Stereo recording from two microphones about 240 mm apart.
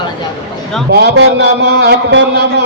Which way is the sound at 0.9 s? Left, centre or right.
Right.